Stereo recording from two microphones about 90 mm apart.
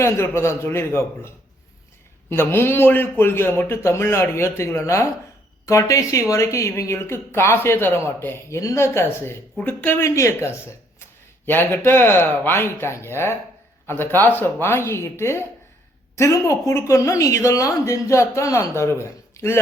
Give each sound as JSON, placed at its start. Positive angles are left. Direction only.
{"t": 0.0, "sound": "a man's voice", "side_deg": 30}
{"t": 2.3, "sound": "a man's voice", "side_deg": 25}